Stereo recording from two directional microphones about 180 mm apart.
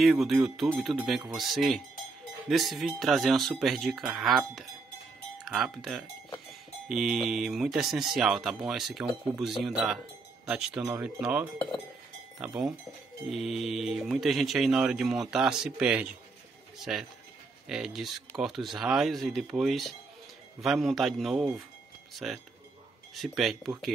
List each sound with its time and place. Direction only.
0.0 s speech: centre (ahead or behind)